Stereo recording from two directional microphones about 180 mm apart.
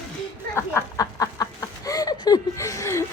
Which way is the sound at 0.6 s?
15° left (ahead or behind).